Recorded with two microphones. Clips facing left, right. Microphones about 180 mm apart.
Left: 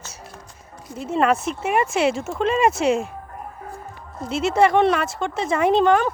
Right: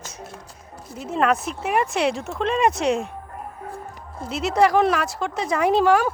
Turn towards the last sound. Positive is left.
turn(degrees=-5)  # may be behind; listen again after turning